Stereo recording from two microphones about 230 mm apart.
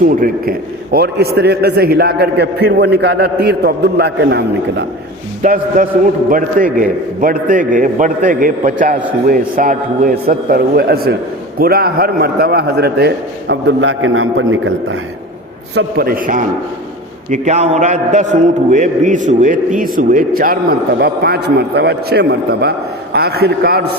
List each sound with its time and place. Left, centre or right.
0.0 s a man's voice: right
5.4 s a man's voice: right
15.7 s a man's voice: right